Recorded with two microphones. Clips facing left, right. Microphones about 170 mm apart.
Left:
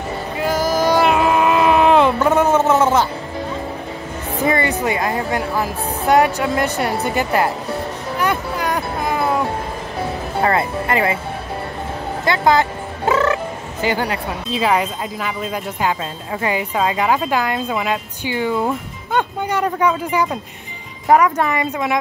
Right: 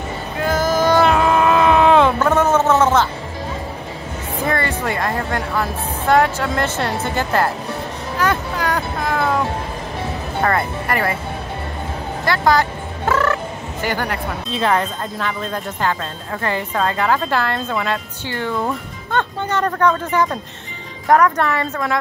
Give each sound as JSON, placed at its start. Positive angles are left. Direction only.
{"t": 0.4, "sound": "a sound", "side_deg": 10}
{"t": 2.1, "sound": "a sound", "side_deg": 15}
{"t": 2.8, "sound": "music", "side_deg": 10}
{"t": 4.5, "sound": "music", "side_deg": 20}
{"t": 5.5, "sound": "speech", "side_deg": 20}
{"t": 8.2, "sound": "music", "side_deg": 10}
{"t": 10.4, "sound": "speech", "side_deg": 20}
{"t": 12.3, "sound": "music", "side_deg": 20}
{"t": 14.5, "sound": "speech", "side_deg": 5}